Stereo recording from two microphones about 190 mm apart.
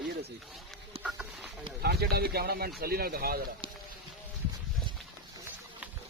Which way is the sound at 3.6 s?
25° right (ahead or behind).